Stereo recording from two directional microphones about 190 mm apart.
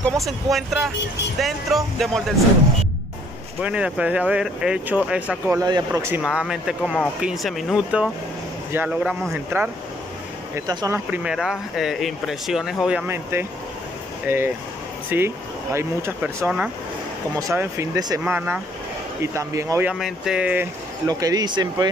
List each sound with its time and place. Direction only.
0.0 s speech: centre (ahead or behind)
3.6 s speech: 5° right (ahead or behind)
5.6 s speech: 15° right (ahead or behind)
6.2 s speech: centre (ahead or behind); by 11.0 s 20° right (ahead or behind)
11.1 s speech: 5° right (ahead or behind)
18.2 s speech: 10° right (ahead or behind)
19.9 s speech: 5° right (ahead or behind)
21.1 s speech: 20° right (ahead or behind)